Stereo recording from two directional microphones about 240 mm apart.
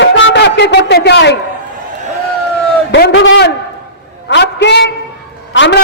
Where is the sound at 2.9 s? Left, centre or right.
Left.